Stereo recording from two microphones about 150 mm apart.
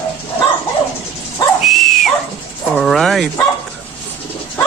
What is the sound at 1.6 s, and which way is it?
Dog, centre (ahead or behind).